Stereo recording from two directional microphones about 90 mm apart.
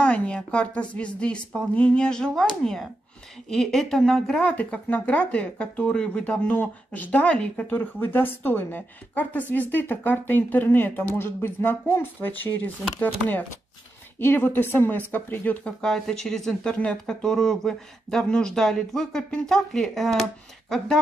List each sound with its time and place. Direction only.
0.0 s a woman's voice: 15° left (ahead or behind)
14.2 s speech: 20° left (ahead or behind)
15.8 s speech: 5° left (ahead or behind)